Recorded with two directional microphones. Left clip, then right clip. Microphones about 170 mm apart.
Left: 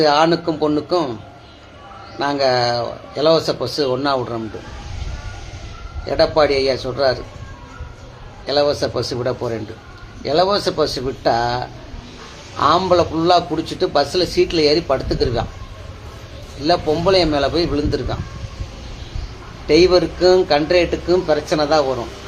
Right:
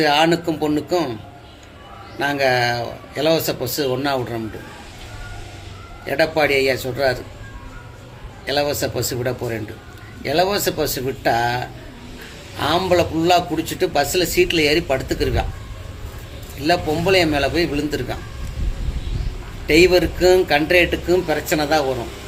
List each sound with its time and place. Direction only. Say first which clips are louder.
0.0 s a man's voice: left 2 dB; 5° left (ahead or behind)
2.1 s a man's voice: left 1 dB; 5° left (ahead or behind)
6.1 s a man's voice: left 3 dB; 5° left (ahead or behind)
8.4 s a man's voice: left 3 dB; 5° left (ahead or behind)
16.6 s a man's voice: left 2 dB; 5° left (ahead or behind)
19.6 s a man's voice: left 1 dB; centre (ahead or behind)